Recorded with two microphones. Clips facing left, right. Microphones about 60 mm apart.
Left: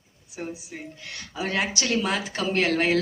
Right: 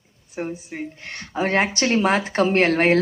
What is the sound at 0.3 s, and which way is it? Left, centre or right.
Speech, right.